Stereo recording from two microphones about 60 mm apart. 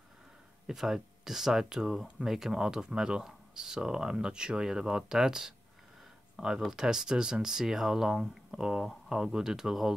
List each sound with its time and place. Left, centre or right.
0.7 s speech: centre